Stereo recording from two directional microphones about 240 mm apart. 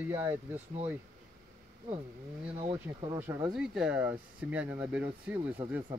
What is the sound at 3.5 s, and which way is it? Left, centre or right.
Speech, centre.